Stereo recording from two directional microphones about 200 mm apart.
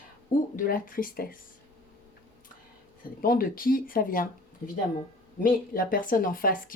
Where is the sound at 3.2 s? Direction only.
45° left (ahead or behind).